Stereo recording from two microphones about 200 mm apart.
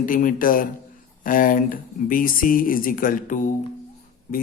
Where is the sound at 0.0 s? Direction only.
40° left (ahead or behind).